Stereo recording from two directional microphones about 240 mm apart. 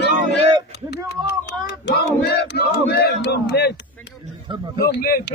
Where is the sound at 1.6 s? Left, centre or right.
Left.